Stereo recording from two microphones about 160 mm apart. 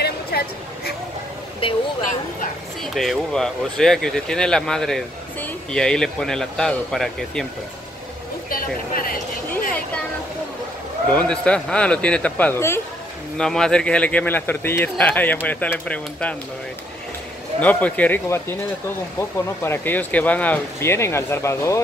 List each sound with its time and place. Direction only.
0.3 s a sound: 80° left
1.6 s speech: 35° left (ahead or behind)
2.8 s speech: centre (ahead or behind)
8.5 s a sound: 65° left (ahead or behind)
11.1 s speech: 5° left (ahead or behind)
13.4 s speech: 5° left (ahead or behind)
17.6 s speech: 10° left (ahead or behind)